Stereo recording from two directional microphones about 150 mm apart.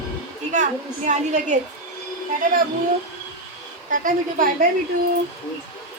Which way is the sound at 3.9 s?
60° right (ahead or behind).